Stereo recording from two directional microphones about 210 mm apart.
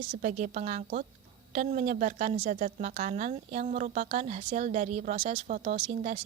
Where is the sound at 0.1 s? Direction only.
35° right (ahead or behind).